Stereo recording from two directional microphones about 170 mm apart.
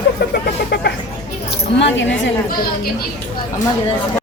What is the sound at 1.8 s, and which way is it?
Speech, 90° left.